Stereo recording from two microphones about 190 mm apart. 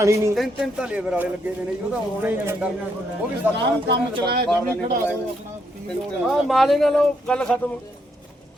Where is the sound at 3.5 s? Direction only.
60° right (ahead or behind).